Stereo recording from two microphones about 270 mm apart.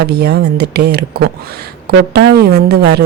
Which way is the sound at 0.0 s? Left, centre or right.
Right.